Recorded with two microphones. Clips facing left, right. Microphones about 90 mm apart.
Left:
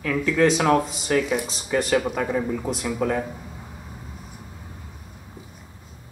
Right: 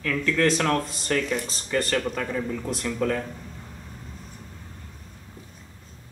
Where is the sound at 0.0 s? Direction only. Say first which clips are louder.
Left 3 dB; 10° left (ahead or behind).